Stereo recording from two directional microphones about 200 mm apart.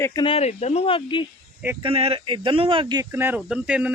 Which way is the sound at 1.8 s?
30° right (ahead or behind).